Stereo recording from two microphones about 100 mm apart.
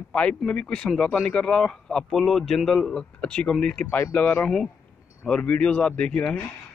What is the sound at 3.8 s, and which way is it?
Speech, 20° left (ahead or behind).